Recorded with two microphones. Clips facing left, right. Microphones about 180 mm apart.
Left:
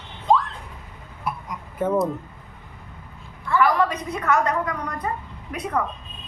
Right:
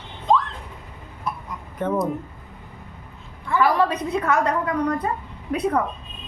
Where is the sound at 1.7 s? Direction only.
5° left (ahead or behind).